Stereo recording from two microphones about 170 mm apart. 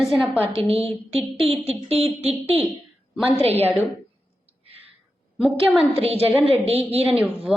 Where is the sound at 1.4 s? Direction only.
35° right (ahead or behind).